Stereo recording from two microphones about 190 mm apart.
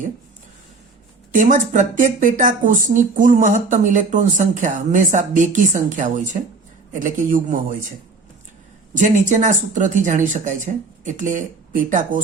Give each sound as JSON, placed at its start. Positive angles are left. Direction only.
{"t": 1.3, "sound": "speech", "side_deg": -40}
{"t": 9.0, "sound": "speech", "side_deg": -40}